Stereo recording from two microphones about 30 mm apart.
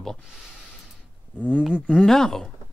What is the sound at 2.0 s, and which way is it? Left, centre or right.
Speech, centre.